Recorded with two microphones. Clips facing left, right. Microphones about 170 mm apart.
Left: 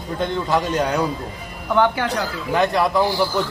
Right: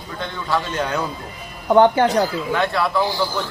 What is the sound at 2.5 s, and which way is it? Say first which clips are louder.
Speech: left 3 dB; 15° left (ahead or behind).